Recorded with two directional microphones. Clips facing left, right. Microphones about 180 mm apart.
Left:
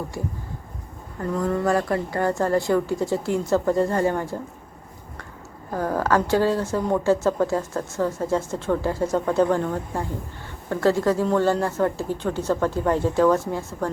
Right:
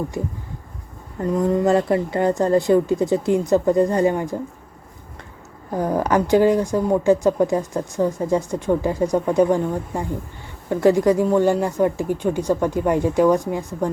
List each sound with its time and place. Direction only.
1.2 s a woman's voice: 20° right (ahead or behind)
5.7 s speech: 20° right (ahead or behind)